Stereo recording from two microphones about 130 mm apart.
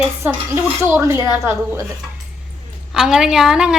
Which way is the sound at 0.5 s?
20° right (ahead or behind).